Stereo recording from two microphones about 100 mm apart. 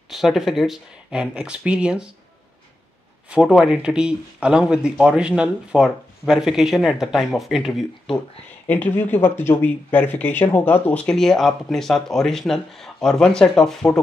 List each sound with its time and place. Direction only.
0.1 s speech: centre (ahead or behind)
3.3 s speech: 10° right (ahead or behind)
8.6 s speech: 15° left (ahead or behind)